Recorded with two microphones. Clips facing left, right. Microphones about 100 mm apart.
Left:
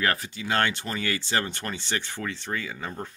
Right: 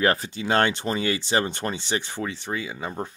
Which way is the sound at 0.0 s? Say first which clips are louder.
Right 5 dB; 25° right (ahead or behind).